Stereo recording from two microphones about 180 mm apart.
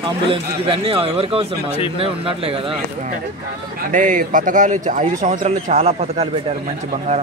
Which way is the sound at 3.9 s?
45° right (ahead or behind).